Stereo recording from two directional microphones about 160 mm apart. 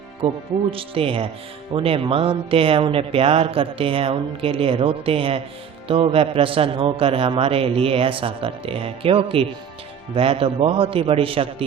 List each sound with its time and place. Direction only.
0.7 s speech: 35° right (ahead or behind)